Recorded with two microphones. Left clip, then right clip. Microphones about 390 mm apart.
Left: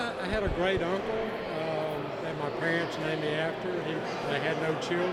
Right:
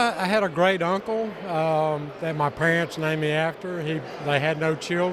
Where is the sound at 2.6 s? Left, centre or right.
Right.